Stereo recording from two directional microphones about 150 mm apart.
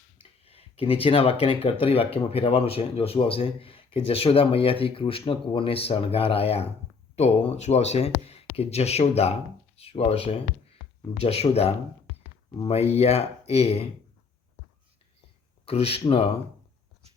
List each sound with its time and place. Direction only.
0.2 s a sound: 40° left (ahead or behind)
1.8 s speech: 40° left (ahead or behind)
15.6 s speech: 40° left (ahead or behind)